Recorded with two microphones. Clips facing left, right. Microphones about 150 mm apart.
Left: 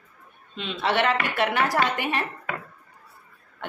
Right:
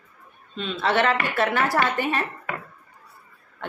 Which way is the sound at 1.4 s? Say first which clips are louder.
Right 1 dB; 15° left (ahead or behind).